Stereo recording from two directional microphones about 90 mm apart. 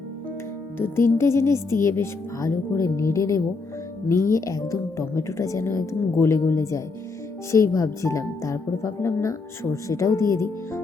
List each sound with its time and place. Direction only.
0.8 s speech: 25° left (ahead or behind)